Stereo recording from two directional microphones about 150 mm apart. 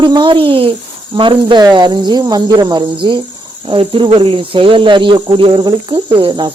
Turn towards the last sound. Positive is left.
turn(degrees=-30)  # may be behind; listen again after turning